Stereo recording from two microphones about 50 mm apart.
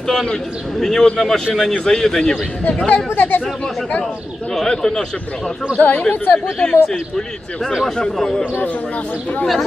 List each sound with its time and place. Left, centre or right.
0.0 s a man's voice: centre
2.9 s speech: left
4.6 s a man's voice: centre
5.8 s a man's voice: left; by 8.5 s centre